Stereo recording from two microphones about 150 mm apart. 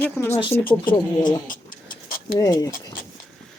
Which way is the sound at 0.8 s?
30° left (ahead or behind).